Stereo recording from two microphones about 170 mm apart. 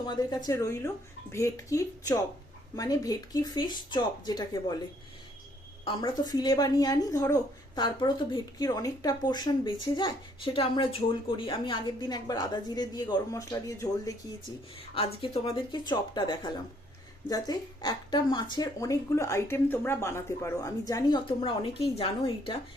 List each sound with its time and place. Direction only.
0.0 s speech: 25° left (ahead or behind)
5.8 s speech: 30° left (ahead or behind)
15.2 s speech: 30° left (ahead or behind)